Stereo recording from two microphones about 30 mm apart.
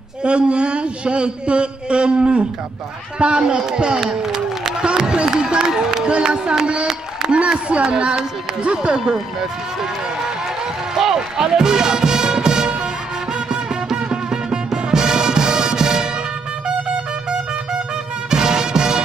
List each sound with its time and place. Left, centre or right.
0.2 s a man's voice: right
4.2 s a sound: centre
4.8 s a man's voice: right
11.1 s music: right
18.3 s music: right